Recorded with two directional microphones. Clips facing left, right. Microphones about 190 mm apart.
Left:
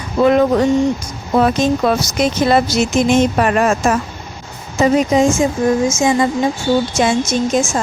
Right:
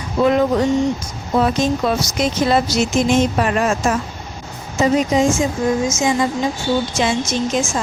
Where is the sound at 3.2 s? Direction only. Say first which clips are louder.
Left 3 dB; 60° left (ahead or behind).